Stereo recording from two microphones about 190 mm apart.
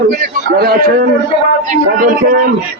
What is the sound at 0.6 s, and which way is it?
Speech, 55° right (ahead or behind).